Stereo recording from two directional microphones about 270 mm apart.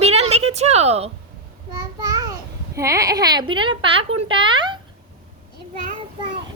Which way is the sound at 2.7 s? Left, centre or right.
Centre.